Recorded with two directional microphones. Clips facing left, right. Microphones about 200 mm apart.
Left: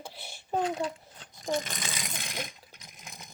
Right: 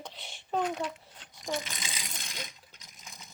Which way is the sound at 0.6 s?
30° left (ahead or behind).